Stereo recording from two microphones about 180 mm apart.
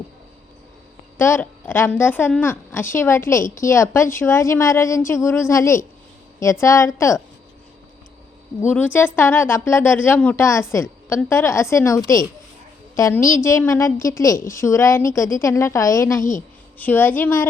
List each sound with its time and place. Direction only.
1.2 s a woman's voice: 15° left (ahead or behind)
8.7 s a woman's voice: 10° left (ahead or behind)